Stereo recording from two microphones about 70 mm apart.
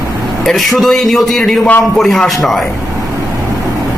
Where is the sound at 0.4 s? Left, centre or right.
Centre.